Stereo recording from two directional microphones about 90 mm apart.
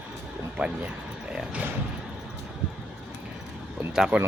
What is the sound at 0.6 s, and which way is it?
Speech, 15° right (ahead or behind).